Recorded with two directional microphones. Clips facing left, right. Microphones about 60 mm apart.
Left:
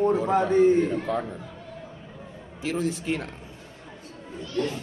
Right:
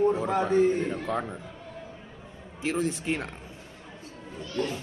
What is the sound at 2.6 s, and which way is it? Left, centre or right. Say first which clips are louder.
Speech: left 1 dB; right.